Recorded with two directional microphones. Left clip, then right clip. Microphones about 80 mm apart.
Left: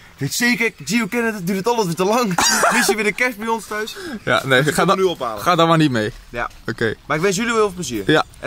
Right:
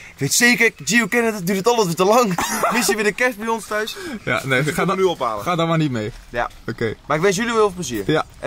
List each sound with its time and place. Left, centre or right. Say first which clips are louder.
0.2 s speech: right 3 dB; centre
4.3 s a man's voice: left 4 dB; centre
5.0 s speech: right 1 dB; centre
5.4 s a man's voice: left 5 dB; centre